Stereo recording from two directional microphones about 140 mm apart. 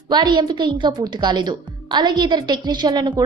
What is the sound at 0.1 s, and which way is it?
A woman's voice, 30° right (ahead or behind).